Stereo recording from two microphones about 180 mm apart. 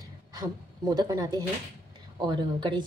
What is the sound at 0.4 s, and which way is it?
A woman's voice, 20° right (ahead or behind).